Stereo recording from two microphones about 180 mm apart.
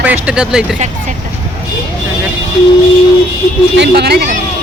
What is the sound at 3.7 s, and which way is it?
Speech, 70° right (ahead or behind).